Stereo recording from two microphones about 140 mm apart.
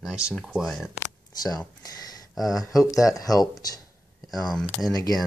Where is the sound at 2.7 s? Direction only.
25° left (ahead or behind).